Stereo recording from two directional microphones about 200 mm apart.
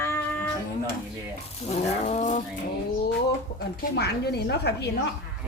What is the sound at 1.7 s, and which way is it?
Roaring cats, 35° left (ahead or behind).